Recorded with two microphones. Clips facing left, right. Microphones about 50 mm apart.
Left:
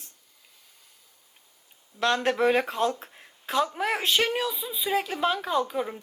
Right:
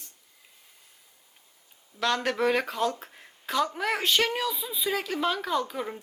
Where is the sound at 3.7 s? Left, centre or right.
Centre.